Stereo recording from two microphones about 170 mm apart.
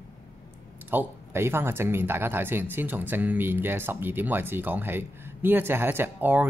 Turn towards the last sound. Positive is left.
turn(degrees=-10)  # may be behind; listen again after turning